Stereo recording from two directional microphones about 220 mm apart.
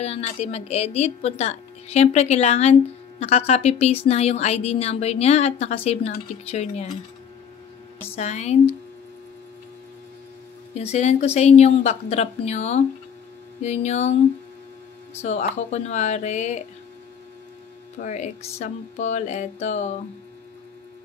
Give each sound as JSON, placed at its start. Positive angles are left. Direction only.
{"t": 0.0, "sound": "speech", "side_deg": 30}
{"t": 8.2, "sound": "a woman's voice", "side_deg": 30}
{"t": 10.7, "sound": "a woman's voice", "side_deg": 30}
{"t": 15.2, "sound": "a woman's voice", "side_deg": 30}
{"t": 18.0, "sound": "a woman's voice", "side_deg": 35}